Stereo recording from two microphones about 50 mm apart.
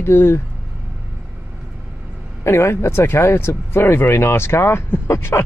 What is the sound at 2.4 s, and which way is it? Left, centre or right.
Speech, left.